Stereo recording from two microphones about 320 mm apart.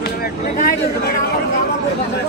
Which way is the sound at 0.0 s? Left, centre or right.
Left.